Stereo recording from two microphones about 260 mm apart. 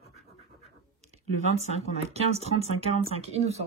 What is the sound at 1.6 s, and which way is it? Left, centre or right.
Speech, left.